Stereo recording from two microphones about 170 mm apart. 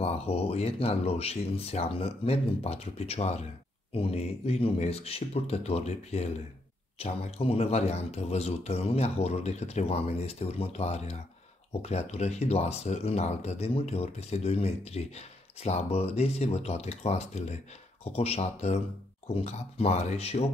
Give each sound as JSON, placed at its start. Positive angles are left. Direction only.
{"t": 0.0, "sound": "speech", "side_deg": 35}